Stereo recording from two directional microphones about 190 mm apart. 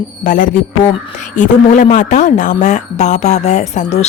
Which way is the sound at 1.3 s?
40° left (ahead or behind).